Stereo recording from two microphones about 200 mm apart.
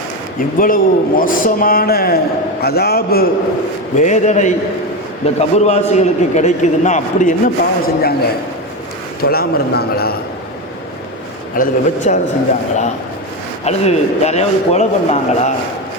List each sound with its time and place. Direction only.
0.3 s a man's voice: 45° left (ahead or behind)
3.9 s a man's voice: 35° left (ahead or behind)
9.2 s a man's voice: 50° left (ahead or behind)
11.5 s a man's voice: 40° left (ahead or behind)
13.7 s a man's voice: 35° left (ahead or behind)